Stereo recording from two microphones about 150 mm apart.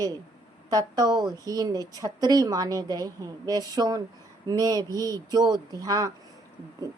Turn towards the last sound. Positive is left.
turn(degrees=-25)  # may be behind; listen again after turning